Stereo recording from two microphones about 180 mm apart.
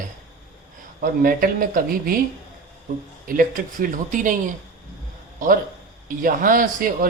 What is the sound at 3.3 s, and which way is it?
A man's voice, 50° right (ahead or behind).